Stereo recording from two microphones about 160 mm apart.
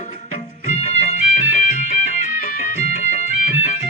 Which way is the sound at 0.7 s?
40° left (ahead or behind).